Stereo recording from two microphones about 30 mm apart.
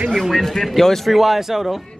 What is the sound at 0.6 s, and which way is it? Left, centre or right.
Speech, centre.